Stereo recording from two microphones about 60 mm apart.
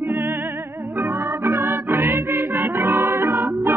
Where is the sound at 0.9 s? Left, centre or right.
Right.